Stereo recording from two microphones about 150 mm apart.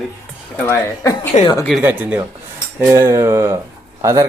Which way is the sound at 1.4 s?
30° left (ahead or behind).